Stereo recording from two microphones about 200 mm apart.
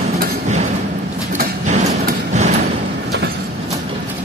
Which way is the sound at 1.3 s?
40° right (ahead or behind).